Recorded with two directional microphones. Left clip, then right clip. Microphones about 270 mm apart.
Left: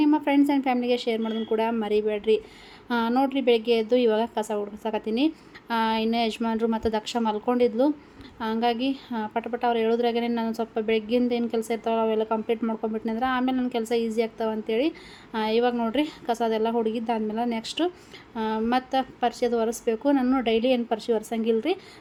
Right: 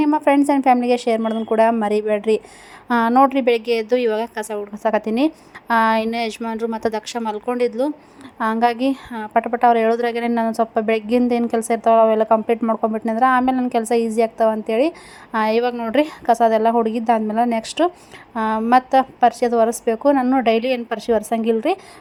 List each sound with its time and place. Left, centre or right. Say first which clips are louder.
0.0 s a woman's voice: right 6 dB; centre